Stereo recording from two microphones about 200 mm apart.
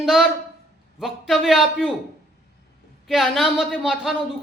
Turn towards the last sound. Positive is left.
turn(degrees=0)  # may be behind; listen again after turning